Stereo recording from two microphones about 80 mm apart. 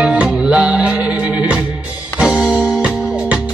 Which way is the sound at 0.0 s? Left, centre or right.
Centre.